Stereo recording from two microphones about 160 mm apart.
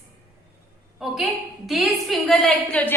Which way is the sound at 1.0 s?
Centre (ahead or behind).